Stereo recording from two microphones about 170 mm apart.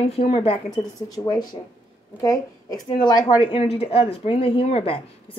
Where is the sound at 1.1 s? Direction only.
20° left (ahead or behind).